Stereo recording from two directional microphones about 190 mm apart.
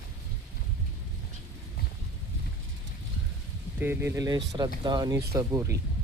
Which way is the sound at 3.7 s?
10° right (ahead or behind).